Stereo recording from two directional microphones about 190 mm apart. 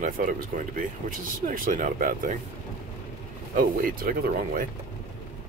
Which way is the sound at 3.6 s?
45° right (ahead or behind).